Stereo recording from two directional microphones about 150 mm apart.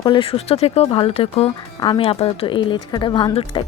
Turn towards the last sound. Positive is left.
turn(degrees=35)  # may be behind; listen again after turning